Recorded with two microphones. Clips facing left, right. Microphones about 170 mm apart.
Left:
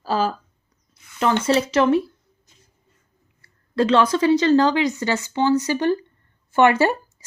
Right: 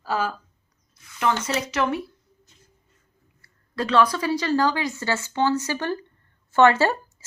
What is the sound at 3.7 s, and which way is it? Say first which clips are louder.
A woman's voice: left 3 dB; 25° left (ahead or behind).